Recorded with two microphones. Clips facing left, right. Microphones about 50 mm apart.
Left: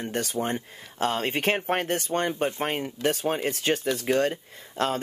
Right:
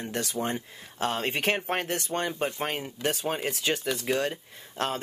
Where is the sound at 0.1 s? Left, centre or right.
Left.